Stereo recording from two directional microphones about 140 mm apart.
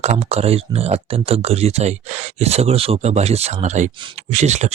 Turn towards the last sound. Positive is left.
turn(degrees=-55)  # may be behind; listen again after turning